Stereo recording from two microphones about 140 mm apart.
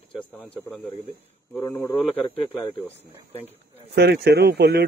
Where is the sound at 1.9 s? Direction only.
35° left (ahead or behind).